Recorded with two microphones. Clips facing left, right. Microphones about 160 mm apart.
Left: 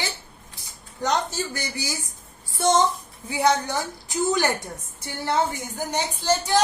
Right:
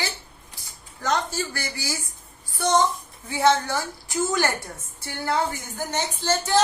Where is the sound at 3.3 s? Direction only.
15° left (ahead or behind).